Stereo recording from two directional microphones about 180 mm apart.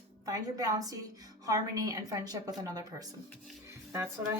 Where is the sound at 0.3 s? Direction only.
20° right (ahead or behind).